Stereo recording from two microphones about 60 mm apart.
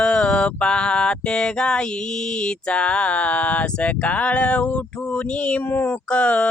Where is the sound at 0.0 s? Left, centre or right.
Centre.